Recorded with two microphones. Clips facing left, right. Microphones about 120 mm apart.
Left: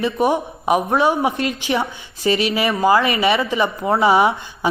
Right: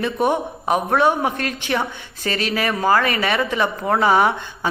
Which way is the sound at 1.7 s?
15° left (ahead or behind).